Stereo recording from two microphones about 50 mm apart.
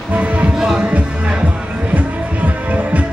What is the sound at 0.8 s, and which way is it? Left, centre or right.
Music, right.